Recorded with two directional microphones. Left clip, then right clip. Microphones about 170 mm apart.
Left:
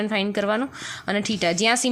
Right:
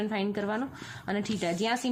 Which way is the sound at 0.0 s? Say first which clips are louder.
Left 8 dB; 25° left (ahead or behind).